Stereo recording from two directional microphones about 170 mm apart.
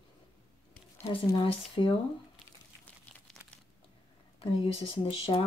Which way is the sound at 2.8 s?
5° left (ahead or behind).